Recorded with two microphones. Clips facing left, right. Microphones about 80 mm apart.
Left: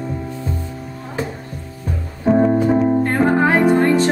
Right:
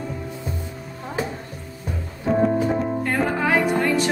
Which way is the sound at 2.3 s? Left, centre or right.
Left.